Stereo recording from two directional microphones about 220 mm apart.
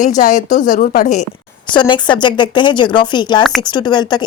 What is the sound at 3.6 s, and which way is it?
Speech, 20° left (ahead or behind).